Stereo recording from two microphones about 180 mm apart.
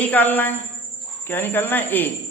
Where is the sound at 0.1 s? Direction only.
10° left (ahead or behind).